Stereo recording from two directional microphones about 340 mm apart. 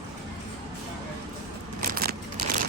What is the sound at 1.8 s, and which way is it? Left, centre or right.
Keys jangling, right.